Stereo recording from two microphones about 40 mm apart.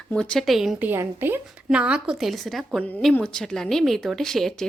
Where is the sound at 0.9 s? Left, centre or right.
Right.